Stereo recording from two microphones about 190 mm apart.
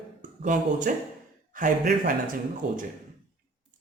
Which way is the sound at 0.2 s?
45° right (ahead or behind).